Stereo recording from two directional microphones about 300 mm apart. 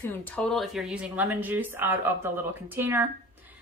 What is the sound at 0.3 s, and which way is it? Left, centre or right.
A woman's voice, centre.